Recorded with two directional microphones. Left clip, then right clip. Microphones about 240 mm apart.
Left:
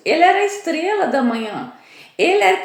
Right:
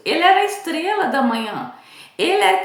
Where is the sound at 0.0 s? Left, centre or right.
Centre.